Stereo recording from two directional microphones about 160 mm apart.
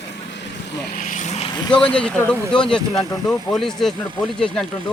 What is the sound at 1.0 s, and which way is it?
Vehicle, 50° left (ahead or behind).